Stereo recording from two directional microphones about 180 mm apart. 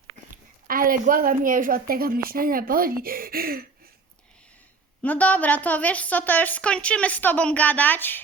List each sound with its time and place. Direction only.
0.7 s a woman's voice: 50° right (ahead or behind)
5.0 s a woman's voice: 10° left (ahead or behind)